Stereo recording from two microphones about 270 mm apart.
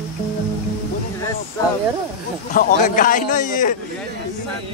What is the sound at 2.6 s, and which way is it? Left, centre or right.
Speech, left.